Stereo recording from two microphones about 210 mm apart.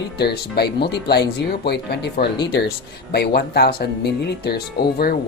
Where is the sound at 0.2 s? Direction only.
50° left (ahead or behind).